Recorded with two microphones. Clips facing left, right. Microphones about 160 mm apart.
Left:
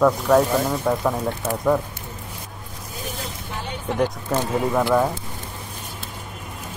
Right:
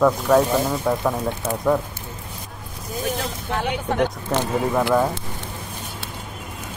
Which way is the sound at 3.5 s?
70° right (ahead or behind).